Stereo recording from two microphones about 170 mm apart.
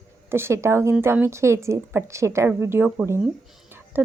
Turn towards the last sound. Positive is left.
turn(degrees=-10)  # may be behind; listen again after turning